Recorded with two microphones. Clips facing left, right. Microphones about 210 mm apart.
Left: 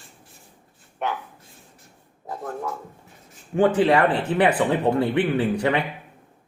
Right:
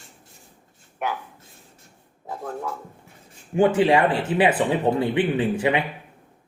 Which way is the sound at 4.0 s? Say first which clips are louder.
Even; 10° right (ahead or behind).